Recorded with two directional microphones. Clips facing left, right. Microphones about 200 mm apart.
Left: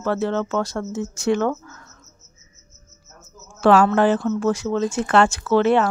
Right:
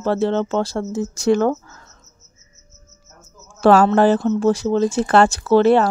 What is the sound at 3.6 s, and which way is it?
Speech, 40° right (ahead or behind).